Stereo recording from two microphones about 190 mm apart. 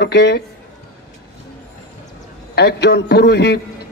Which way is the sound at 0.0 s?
60° left (ahead or behind).